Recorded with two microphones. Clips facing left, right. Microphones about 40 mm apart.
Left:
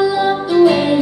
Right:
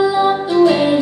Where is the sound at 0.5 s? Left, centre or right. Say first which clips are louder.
Left 1 dB; centre.